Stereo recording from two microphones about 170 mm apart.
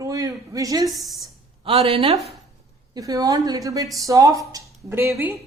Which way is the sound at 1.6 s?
35° right (ahead or behind).